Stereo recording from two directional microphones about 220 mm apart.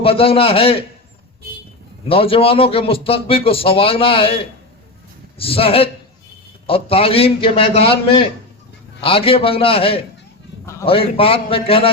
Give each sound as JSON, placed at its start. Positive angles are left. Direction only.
{"t": 0.0, "sound": "speech", "side_deg": 25}
{"t": 2.0, "sound": "speech", "side_deg": 25}
{"t": 5.4, "sound": "speech", "side_deg": 25}